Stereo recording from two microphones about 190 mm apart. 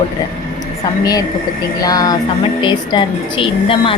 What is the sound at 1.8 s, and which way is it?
A woman's voice, 20° left (ahead or behind).